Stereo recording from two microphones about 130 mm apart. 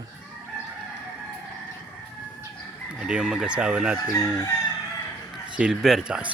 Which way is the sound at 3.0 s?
5° right (ahead or behind).